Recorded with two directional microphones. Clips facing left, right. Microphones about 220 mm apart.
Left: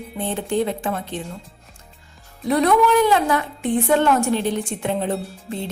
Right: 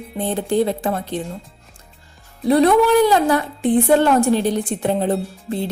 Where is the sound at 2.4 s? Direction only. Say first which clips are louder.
Right 3 dB; 30° right (ahead or behind).